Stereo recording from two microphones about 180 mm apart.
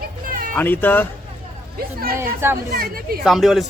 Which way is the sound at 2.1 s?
10° right (ahead or behind).